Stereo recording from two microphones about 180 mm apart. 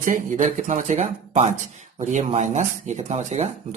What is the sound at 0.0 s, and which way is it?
Speech, 45° right (ahead or behind).